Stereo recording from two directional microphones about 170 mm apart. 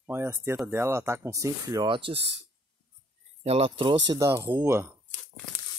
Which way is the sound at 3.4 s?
35° right (ahead or behind).